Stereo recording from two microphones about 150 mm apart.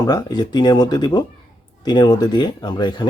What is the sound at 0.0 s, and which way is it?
Speech, 25° left (ahead or behind).